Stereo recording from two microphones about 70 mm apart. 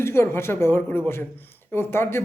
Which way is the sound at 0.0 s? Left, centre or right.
Left.